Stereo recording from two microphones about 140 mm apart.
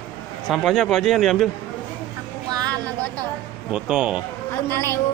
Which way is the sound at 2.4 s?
30° right (ahead or behind).